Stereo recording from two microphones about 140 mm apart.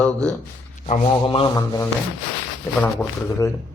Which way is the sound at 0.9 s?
40° left (ahead or behind).